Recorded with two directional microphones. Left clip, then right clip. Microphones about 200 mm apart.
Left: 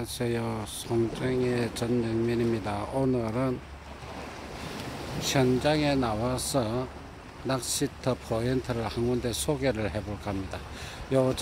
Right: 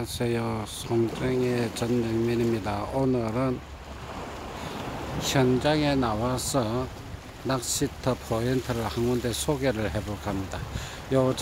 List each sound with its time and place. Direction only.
0.0 s speech: 5° right (ahead or behind)
5.2 s speech: centre (ahead or behind)